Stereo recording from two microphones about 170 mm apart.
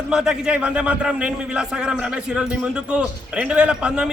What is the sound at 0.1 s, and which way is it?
A man's voice, 5° right (ahead or behind).